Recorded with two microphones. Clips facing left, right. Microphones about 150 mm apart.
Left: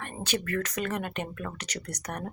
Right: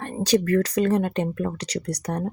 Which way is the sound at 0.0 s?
35° right (ahead or behind).